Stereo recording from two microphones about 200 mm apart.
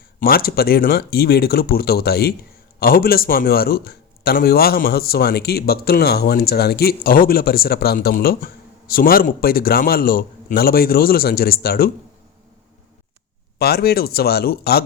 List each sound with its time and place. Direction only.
0.2 s a man's voice: 50° left (ahead or behind)
13.6 s a man's voice: 50° left (ahead or behind)